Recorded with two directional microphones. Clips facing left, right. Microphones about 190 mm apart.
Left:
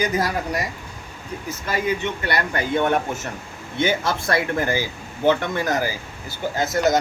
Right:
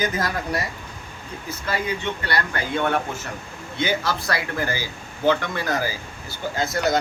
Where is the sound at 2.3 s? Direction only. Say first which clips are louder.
Left 4 dB; 20° left (ahead or behind).